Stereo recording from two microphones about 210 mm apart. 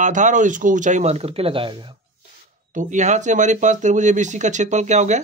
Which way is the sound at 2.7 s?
35° right (ahead or behind).